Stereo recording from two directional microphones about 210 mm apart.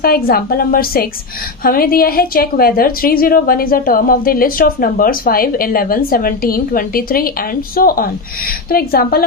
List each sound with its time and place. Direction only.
0.0 s a woman's voice: 45° left (ahead or behind)